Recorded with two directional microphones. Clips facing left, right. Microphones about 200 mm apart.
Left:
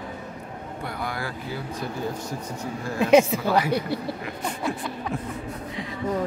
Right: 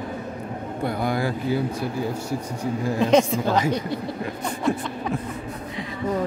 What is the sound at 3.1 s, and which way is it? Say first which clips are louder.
Speech: left 2 dB; 10° left (ahead or behind).